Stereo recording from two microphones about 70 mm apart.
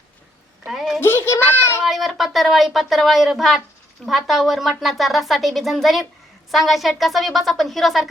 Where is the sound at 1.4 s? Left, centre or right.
Left.